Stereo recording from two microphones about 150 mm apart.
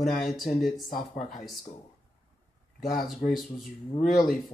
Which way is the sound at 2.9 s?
Centre (ahead or behind).